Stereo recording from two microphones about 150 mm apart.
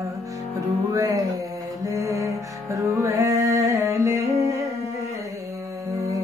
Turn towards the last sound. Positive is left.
turn(degrees=-20)  # may be behind; listen again after turning